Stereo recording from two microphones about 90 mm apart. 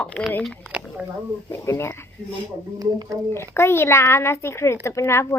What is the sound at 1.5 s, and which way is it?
Speech, 30° left (ahead or behind).